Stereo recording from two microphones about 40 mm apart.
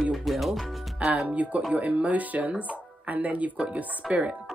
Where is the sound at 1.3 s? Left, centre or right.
Right.